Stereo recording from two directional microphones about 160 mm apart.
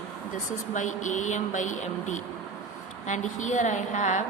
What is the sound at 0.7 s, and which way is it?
A woman's voice, 50° left (ahead or behind).